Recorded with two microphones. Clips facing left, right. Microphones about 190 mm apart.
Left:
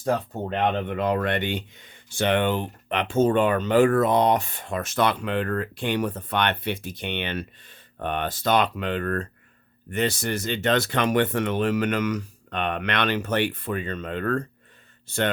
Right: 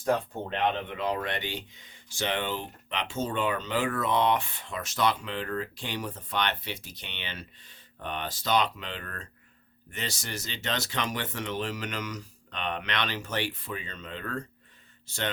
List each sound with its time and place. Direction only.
0.5 s speech: 50° left (ahead or behind)